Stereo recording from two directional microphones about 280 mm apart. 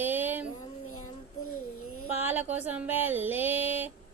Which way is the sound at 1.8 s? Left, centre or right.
Left.